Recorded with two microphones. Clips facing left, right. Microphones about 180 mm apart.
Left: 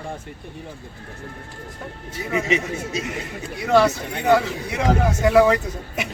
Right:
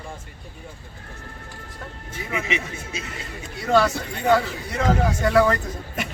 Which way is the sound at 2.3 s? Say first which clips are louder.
Left 6 dB; 40° left (ahead or behind).